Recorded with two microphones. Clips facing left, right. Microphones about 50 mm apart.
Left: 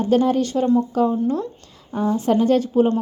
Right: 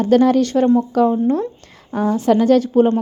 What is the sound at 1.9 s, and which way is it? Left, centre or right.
Speech, right.